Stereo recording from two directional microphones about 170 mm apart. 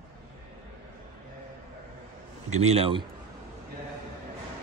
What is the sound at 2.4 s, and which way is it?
Speech, 40° right (ahead or behind).